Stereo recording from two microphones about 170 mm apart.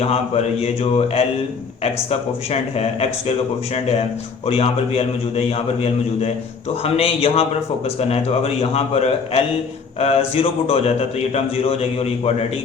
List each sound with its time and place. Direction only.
0.0 s speech: 35° left (ahead or behind)
4.4 s speech: 35° left (ahead or behind)